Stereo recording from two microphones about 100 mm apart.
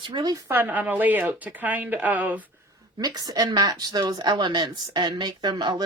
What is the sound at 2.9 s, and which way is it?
A woman's voice, 40° right (ahead or behind).